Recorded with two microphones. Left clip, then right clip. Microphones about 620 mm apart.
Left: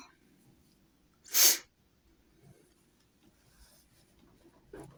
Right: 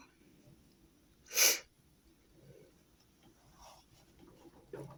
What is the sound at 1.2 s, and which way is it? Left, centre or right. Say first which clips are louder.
Sneeze: left 3 dB; centre.